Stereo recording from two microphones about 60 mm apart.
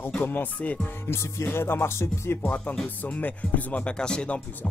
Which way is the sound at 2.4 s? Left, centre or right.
Left.